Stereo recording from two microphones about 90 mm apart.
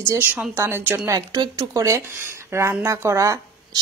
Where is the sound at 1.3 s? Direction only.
50° right (ahead or behind).